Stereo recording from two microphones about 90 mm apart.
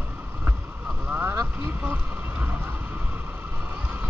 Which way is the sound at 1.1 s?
20° right (ahead or behind).